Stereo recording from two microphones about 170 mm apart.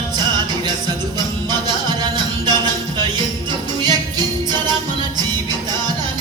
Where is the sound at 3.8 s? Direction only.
25° right (ahead or behind).